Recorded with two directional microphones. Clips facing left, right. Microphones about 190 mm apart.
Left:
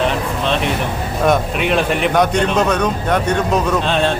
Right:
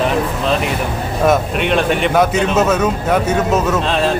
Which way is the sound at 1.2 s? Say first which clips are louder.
Right 1 dB; centre (ahead or behind).